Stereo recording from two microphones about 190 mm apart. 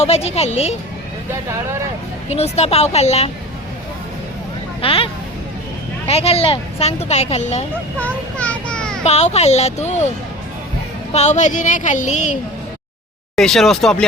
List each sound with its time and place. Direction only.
0.0 s speech: 35° left (ahead or behind)
2.3 s speech: 35° left (ahead or behind)
4.8 s speech: 30° left (ahead or behind)
6.1 s speech: 30° left (ahead or behind)
7.9 s a sound: 5° left (ahead or behind)
9.0 s speech: 35° left (ahead or behind)
11.1 s speech: 35° left (ahead or behind)
13.3 s speech: centre (ahead or behind)